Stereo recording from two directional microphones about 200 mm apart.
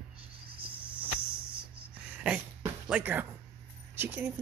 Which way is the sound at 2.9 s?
10° right (ahead or behind).